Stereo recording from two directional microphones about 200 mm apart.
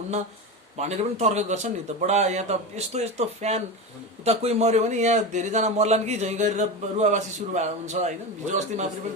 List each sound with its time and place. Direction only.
0.8 s a man's voice: 35° right (ahead or behind)